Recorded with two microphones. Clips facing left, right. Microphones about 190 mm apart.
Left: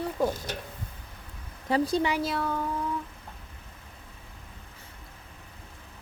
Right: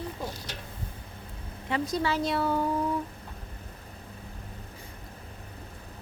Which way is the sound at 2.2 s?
Centre (ahead or behind).